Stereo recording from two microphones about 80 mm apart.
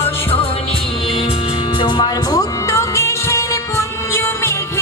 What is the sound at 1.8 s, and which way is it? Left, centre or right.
Music, left.